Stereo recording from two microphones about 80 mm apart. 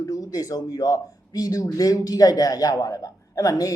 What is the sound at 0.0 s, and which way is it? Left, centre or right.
Speech, left.